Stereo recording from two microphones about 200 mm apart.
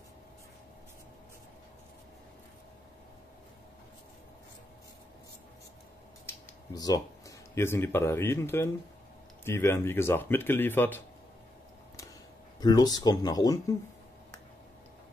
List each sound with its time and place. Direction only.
6.2 s a sound: 20° left (ahead or behind)
9.4 s speech: 15° left (ahead or behind)
12.5 s speech: 20° left (ahead or behind)